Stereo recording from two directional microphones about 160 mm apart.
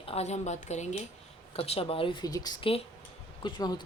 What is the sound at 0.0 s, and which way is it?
A woman's voice, 40° left (ahead or behind).